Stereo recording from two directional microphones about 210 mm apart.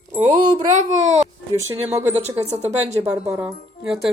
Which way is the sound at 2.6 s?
30° right (ahead or behind).